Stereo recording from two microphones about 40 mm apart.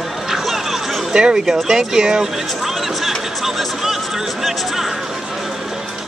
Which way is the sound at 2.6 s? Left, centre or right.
Centre.